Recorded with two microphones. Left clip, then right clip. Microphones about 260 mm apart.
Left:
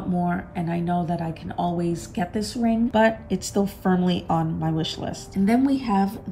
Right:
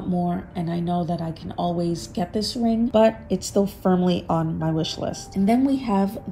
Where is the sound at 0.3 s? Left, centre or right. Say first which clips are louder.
Left 1 dB; centre.